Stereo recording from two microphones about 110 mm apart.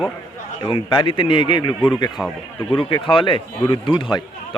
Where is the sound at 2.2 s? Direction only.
10° left (ahead or behind).